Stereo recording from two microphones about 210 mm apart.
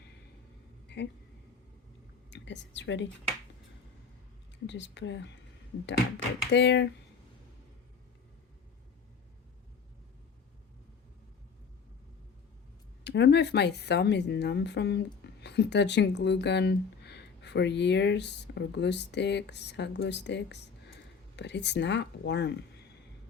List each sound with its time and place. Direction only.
0.9 s speech: 55° left (ahead or behind)
2.3 s a woman's voice: 55° left (ahead or behind)
4.6 s a woman's voice: 60° left (ahead or behind)
6.5 s a woman's voice: 55° left (ahead or behind)
13.1 s a woman's voice: 55° left (ahead or behind)